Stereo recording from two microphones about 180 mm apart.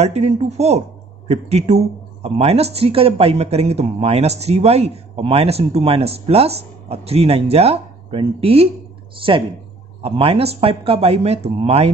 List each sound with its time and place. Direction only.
0.0 s speech: 35° right (ahead or behind)
10.0 s speech: 35° right (ahead or behind)